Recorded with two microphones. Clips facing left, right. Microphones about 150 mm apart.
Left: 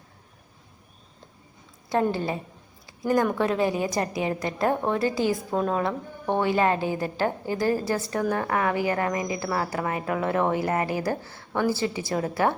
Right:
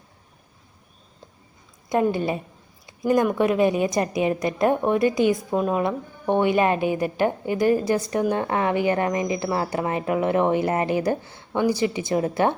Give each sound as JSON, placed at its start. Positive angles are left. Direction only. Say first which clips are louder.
{"t": 1.9, "sound": "a woman's voice", "louder": "right 3 dB", "side_deg": -15}